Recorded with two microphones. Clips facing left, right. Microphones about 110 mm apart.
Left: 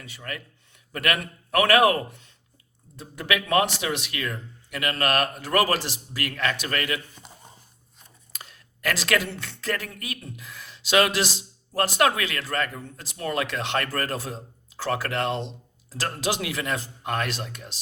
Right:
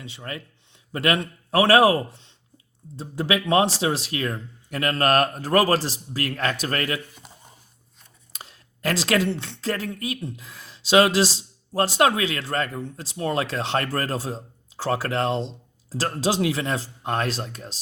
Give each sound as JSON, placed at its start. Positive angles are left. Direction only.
{"t": 0.0, "sound": "speech", "side_deg": -25}
{"t": 8.3, "sound": "speech", "side_deg": -30}